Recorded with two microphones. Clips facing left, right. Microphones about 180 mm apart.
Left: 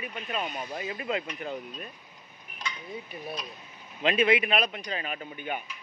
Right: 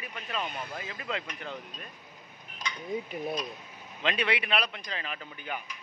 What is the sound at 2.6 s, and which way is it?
Speech, 20° right (ahead or behind).